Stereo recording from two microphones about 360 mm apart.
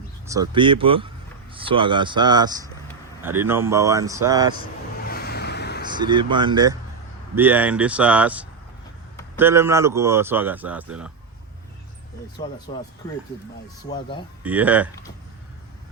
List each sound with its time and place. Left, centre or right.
0.3 s speech: centre
5.0 s a sound: left
5.8 s speech: centre
12.4 s speech: centre
13.8 s speech: centre
14.4 s speech: centre